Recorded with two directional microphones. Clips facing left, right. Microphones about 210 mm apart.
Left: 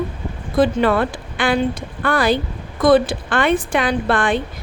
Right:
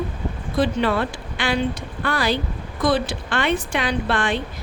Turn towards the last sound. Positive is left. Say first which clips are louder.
# left 4 dB
turn(degrees=50)  # may be behind; listen again after turning